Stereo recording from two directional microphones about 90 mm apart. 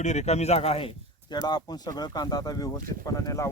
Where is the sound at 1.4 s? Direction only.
50° left (ahead or behind).